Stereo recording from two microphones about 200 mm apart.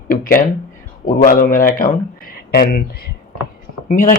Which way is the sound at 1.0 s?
45° left (ahead or behind).